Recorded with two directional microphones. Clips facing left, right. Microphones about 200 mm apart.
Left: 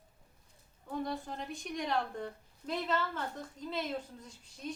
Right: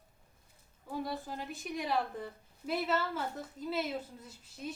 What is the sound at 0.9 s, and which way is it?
Speech, 5° right (ahead or behind).